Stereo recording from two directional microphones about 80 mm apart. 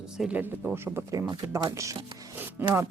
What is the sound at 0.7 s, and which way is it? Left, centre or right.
Speech, right.